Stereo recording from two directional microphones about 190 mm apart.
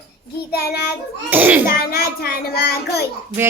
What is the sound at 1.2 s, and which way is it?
Speech, 10° right (ahead or behind).